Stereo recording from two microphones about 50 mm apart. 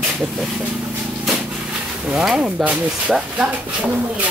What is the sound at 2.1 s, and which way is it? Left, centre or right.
Speech, centre.